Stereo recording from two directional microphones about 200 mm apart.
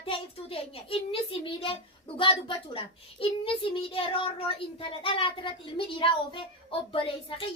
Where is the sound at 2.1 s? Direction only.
25° left (ahead or behind).